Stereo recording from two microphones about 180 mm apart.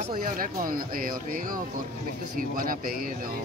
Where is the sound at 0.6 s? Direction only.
50° right (ahead or behind).